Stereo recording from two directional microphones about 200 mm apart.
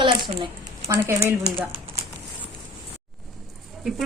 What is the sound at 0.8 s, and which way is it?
Speech, 15° right (ahead or behind).